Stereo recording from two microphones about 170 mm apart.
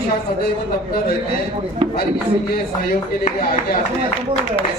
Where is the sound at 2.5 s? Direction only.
60° left (ahead or behind).